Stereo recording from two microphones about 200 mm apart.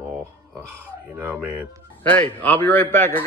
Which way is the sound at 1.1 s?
10° right (ahead or behind).